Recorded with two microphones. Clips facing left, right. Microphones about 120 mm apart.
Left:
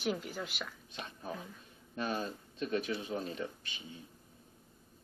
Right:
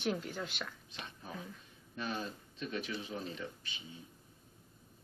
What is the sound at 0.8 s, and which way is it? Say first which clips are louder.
Whispering: left 5 dB; 50° left (ahead or behind).